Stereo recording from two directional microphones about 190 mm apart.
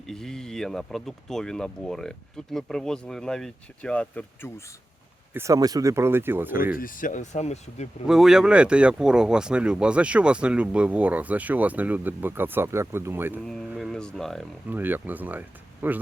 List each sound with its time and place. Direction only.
0.1 s speech: centre (ahead or behind)
5.3 s speech: 15° right (ahead or behind)
6.7 s speech: 45° left (ahead or behind)
8.0 s speech: centre (ahead or behind)
13.5 s speech: centre (ahead or behind)
14.7 s speech: 10° right (ahead or behind)